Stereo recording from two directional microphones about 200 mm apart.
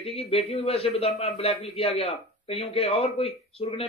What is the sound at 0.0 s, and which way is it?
Speech, 30° left (ahead or behind).